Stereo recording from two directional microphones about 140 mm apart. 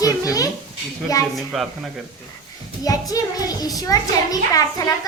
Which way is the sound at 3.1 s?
25° left (ahead or behind).